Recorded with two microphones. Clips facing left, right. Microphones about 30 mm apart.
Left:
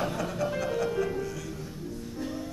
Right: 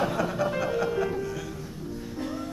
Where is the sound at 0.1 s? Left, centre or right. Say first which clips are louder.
Right 3 dB; centre.